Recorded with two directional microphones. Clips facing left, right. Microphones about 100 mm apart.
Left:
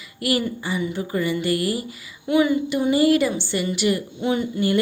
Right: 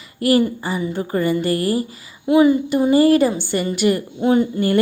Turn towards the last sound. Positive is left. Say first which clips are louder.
# right 5 dB
turn(degrees=-45)  # may be behind; listen again after turning